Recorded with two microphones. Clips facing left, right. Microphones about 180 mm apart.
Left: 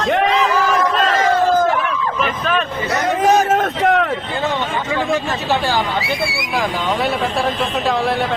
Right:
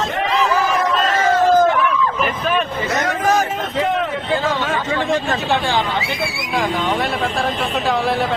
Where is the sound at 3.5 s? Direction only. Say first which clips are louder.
Left 5 dB; 75° left (ahead or behind).